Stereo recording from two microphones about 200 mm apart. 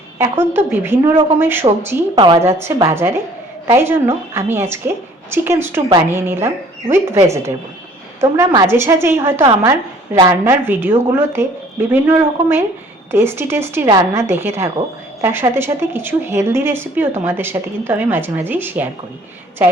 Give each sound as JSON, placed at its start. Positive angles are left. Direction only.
{"t": 0.2, "sound": "a woman's voice", "side_deg": -10}
{"t": 1.1, "sound": "a woman's voice", "side_deg": -25}
{"t": 1.4, "sound": "a woman's voice", "side_deg": -10}
{"t": 2.1, "sound": "a woman's voice", "side_deg": -25}
{"t": 2.6, "sound": "a woman's voice", "side_deg": -15}